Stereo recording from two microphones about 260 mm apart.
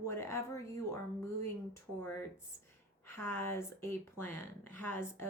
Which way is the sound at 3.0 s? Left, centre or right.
Centre.